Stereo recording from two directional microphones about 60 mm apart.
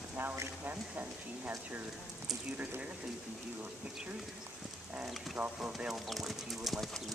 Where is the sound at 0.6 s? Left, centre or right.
Right.